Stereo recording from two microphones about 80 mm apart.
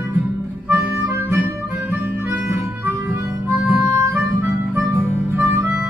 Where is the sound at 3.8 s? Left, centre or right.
Right.